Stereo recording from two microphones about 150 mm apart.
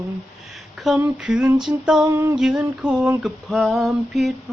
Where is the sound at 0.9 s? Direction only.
10° right (ahead or behind).